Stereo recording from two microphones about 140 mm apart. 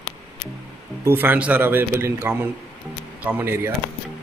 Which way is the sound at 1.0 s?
15° right (ahead or behind).